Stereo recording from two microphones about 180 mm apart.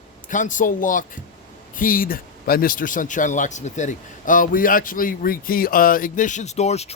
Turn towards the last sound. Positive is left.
turn(degrees=35)  # may be behind; listen again after turning